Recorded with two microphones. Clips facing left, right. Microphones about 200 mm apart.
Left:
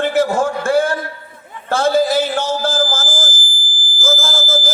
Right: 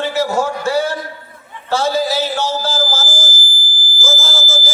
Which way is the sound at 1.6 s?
50° left (ahead or behind).